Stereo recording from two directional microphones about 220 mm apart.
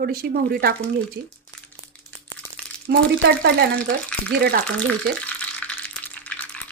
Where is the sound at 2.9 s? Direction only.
50° right (ahead or behind).